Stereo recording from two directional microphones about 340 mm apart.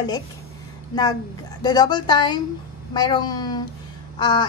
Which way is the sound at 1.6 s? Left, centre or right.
Centre.